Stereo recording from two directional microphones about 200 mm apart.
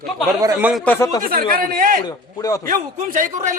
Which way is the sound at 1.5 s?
45° right (ahead or behind).